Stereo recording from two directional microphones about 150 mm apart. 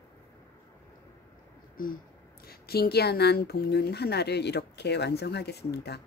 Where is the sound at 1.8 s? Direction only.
70° left (ahead or behind).